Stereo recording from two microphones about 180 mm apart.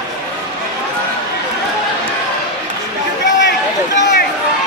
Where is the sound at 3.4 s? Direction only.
80° left.